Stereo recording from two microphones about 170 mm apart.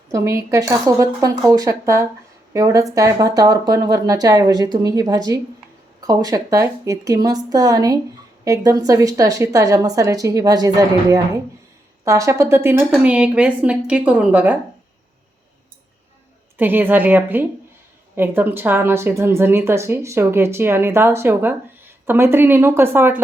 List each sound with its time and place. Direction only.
0.1 s a woman's voice: 15° right (ahead or behind)
16.6 s a woman's voice: 10° right (ahead or behind)